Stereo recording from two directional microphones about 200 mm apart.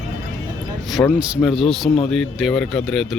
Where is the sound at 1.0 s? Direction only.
15° left (ahead or behind).